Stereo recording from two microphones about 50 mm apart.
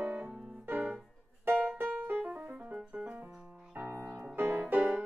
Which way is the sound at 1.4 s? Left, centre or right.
Right.